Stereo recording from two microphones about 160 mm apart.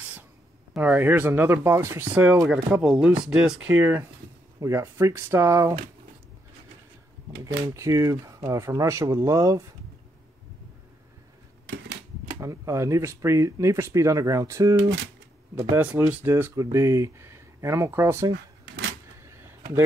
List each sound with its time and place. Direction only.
0.7 s speech: 10° right (ahead or behind)
7.7 s speech: 20° right (ahead or behind)
12.4 s speech: 20° right (ahead or behind)
19.2 s bird: 15° right (ahead or behind)